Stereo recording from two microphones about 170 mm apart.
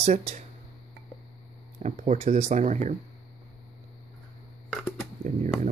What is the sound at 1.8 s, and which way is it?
Speech, 45° right (ahead or behind).